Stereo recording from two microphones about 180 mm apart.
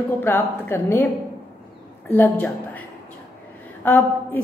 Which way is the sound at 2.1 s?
10° left (ahead or behind).